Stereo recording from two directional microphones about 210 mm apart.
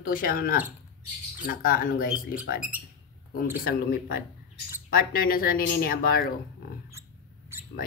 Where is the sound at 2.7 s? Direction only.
10° right (ahead or behind).